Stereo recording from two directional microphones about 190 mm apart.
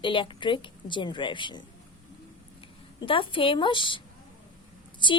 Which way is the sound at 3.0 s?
25° left (ahead or behind).